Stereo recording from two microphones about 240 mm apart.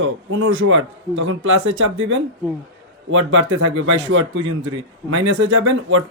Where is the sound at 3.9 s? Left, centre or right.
Right.